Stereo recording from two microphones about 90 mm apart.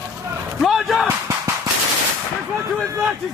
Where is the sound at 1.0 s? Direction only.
35° right (ahead or behind).